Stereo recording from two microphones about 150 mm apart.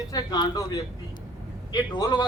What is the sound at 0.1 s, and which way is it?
A man's voice, 25° left (ahead or behind).